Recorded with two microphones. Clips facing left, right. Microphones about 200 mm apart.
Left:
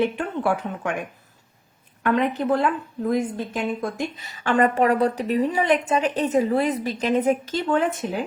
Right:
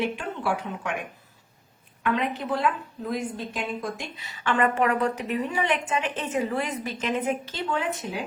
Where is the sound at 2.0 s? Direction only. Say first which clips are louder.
Left 5 dB; 45° left (ahead or behind).